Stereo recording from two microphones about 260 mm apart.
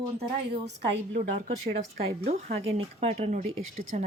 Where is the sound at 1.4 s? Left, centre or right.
Right.